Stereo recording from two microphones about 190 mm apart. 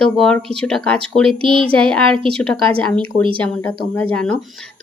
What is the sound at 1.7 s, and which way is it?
A woman's voice, 5° left (ahead or behind).